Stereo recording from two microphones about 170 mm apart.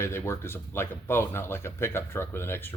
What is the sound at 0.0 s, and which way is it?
Speech, 15° left (ahead or behind).